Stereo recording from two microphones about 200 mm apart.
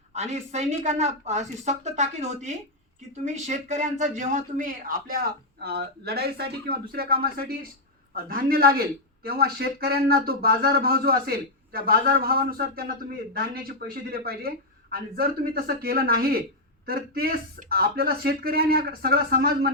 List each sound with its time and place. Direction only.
0.1 s a woman's voice: 35° right (ahead or behind)